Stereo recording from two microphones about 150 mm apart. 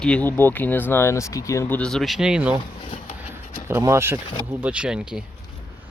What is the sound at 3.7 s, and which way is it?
Speech, 15° right (ahead or behind).